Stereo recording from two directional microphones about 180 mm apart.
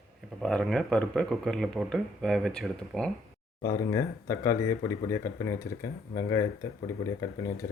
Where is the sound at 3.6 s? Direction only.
15° left (ahead or behind).